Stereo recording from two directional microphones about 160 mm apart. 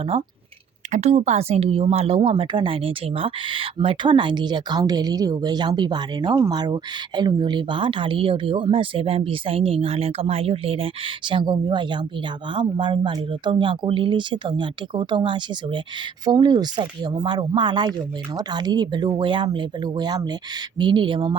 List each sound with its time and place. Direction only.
0.9 s a woman's voice: 45° right (ahead or behind)